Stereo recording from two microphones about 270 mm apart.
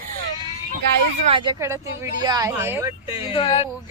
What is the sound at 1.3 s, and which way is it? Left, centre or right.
Speech, centre.